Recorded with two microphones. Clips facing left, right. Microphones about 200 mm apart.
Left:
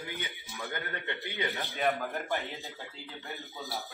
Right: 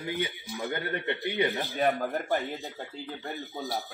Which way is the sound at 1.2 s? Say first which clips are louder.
Right 8 dB; 20° right (ahead or behind).